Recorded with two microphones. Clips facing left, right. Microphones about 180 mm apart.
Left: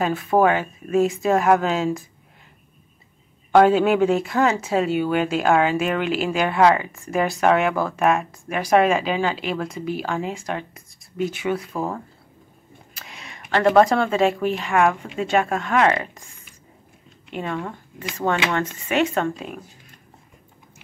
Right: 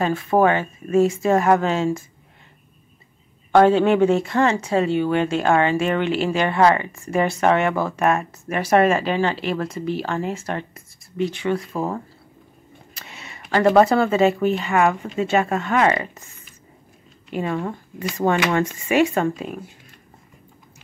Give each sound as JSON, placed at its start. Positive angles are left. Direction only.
{"t": 0.0, "sound": "speech", "side_deg": 0}
{"t": 3.5, "sound": "speech", "side_deg": 5}
{"t": 17.3, "sound": "speech", "side_deg": -5}